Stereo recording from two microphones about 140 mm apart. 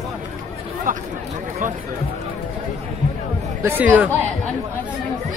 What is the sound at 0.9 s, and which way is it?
Speech, 70° right (ahead or behind).